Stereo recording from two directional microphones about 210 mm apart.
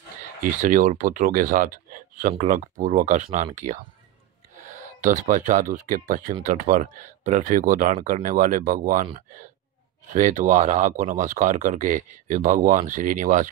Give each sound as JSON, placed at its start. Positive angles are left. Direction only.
{"t": 0.4, "sound": "speech", "side_deg": -40}